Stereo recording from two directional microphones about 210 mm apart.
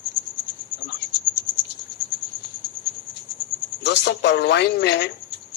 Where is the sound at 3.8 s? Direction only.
55° left (ahead or behind).